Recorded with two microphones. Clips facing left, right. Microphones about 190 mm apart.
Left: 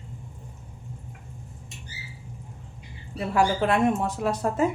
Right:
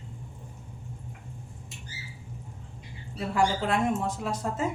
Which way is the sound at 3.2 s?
65° left (ahead or behind).